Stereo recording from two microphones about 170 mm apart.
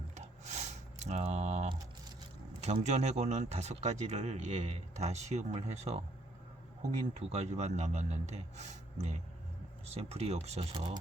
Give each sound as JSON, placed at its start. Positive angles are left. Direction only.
{"t": 0.2, "sound": "a sound", "side_deg": -40}
{"t": 2.6, "sound": "speech", "side_deg": -40}
{"t": 7.2, "sound": "speech", "side_deg": -40}